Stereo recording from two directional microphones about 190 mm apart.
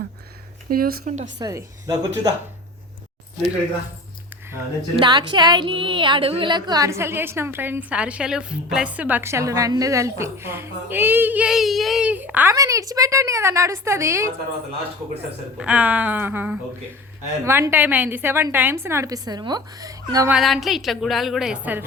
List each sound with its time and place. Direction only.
0.7 s speech: 50° right (ahead or behind)
1.4 s a woman's voice: 20° right (ahead or behind)
4.9 s a woman's voice: 25° right (ahead or behind)
15.5 s a woman's voice: 5° right (ahead or behind)
20.3 s a woman's voice: centre (ahead or behind)